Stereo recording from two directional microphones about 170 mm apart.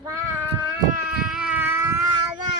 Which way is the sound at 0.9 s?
5° right (ahead or behind).